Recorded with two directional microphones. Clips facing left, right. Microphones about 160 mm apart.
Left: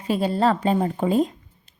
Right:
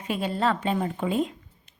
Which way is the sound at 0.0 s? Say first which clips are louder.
Left 5 dB; 35° left (ahead or behind).